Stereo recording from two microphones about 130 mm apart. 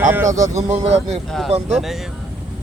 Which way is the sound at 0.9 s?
55° right (ahead or behind).